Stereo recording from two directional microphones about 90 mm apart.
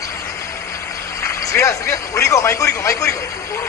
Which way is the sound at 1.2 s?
35° left (ahead or behind).